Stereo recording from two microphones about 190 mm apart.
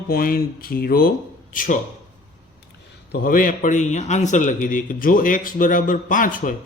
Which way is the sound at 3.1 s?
50° left (ahead or behind).